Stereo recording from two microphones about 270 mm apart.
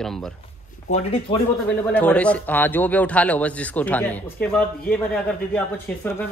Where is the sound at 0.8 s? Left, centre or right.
Left.